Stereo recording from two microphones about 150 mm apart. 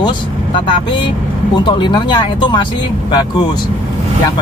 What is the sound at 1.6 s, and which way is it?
Speech, 30° left (ahead or behind).